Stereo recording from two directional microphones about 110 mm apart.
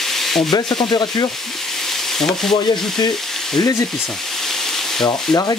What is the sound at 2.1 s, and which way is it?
Frying, 5° left (ahead or behind).